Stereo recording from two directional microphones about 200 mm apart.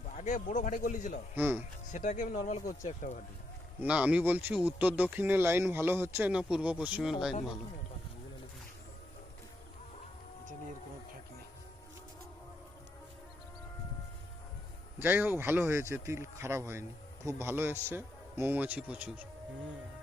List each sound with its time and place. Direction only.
0.2 s speech: 35° left (ahead or behind)
1.4 s speech: 10° right (ahead or behind)
1.9 s speech: 40° left (ahead or behind)
3.8 s speech: 5° right (ahead or behind)
14.9 s speech: 10° right (ahead or behind)